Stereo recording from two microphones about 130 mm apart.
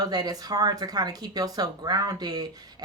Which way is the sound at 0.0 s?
30° right (ahead or behind).